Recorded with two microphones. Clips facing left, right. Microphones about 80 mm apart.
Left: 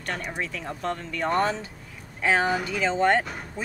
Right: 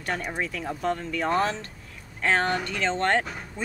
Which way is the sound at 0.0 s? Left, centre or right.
Centre.